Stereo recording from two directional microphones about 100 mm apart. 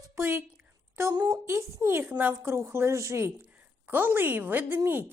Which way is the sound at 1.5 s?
25° right (ahead or behind).